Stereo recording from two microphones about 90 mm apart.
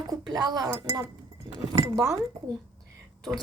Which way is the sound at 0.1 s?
50° right (ahead or behind).